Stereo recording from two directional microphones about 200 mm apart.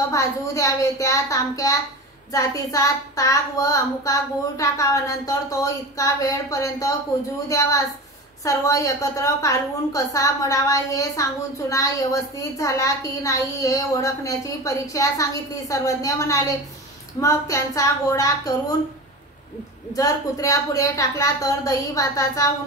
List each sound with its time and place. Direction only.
0.1 s a woman's voice: 15° left (ahead or behind)
19.9 s a woman's voice: 15° left (ahead or behind)